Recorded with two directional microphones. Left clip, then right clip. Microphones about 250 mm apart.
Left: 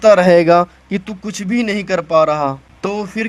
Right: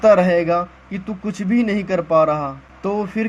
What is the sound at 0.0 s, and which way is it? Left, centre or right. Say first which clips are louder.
A man's voice: left 5 dB; left.